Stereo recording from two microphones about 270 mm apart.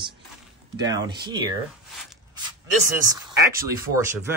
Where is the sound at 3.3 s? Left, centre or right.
Centre.